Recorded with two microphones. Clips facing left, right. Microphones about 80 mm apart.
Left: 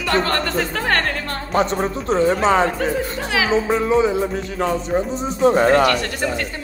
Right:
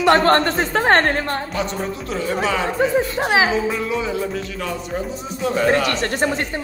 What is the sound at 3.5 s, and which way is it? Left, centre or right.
Speech, left.